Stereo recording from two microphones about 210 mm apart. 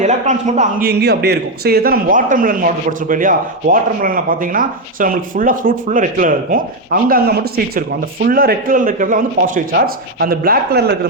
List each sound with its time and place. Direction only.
0.0 s a man's voice: 35° right (ahead or behind)
0.9 s a man's voice: 50° right (ahead or behind)